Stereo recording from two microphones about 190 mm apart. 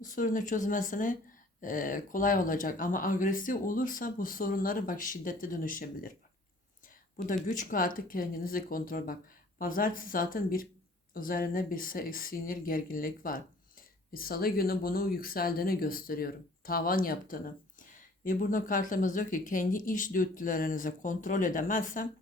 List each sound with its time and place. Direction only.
0.0 s speech: 45° left (ahead or behind)
7.4 s speech: 45° left (ahead or behind)